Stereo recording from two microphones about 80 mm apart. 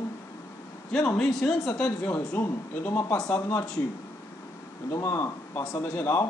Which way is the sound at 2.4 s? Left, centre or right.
Left.